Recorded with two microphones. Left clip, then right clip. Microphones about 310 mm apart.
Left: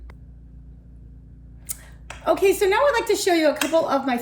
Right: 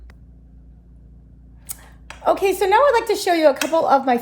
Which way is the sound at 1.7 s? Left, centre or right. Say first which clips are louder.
Left 1 dB; centre.